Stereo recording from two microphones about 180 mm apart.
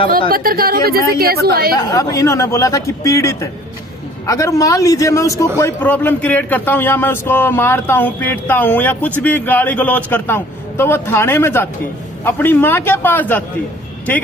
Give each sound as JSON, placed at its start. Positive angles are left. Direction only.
{"t": 0.3, "sound": "a woman's voice", "side_deg": -55}
{"t": 1.9, "sound": "a man's voice", "side_deg": 20}